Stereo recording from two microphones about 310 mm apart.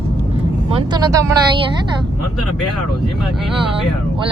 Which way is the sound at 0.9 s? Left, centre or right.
Centre.